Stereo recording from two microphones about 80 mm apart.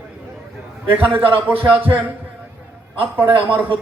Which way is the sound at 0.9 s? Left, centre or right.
Right.